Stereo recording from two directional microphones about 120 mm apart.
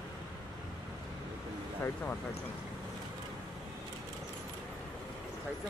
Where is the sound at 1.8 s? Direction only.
15° left (ahead or behind).